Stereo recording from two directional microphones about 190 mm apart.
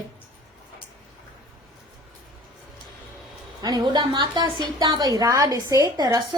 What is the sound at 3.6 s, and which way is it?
A woman's voice, 20° right (ahead or behind).